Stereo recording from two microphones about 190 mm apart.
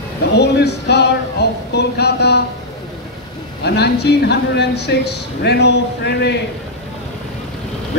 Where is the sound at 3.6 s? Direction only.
60° left (ahead or behind).